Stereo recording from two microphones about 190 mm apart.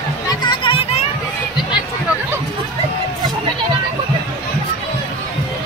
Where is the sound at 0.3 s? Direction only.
25° left (ahead or behind).